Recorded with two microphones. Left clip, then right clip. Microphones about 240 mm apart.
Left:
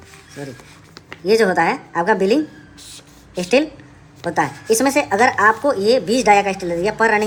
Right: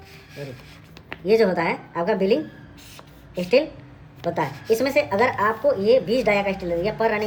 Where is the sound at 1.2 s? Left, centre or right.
Centre.